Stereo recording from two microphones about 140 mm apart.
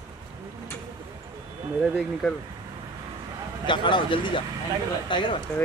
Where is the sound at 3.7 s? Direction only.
35° left (ahead or behind).